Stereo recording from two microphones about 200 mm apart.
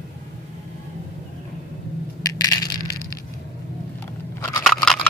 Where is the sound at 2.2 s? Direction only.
15° left (ahead or behind).